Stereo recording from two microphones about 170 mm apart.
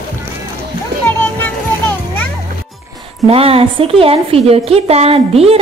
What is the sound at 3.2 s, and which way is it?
A woman's voice, 35° right (ahead or behind).